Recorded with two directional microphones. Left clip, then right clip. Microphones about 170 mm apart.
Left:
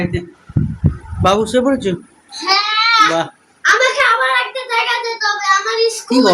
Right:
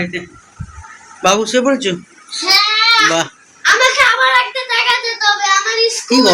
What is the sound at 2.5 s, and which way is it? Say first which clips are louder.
Baby cry: right 2 dB; 5° left (ahead or behind).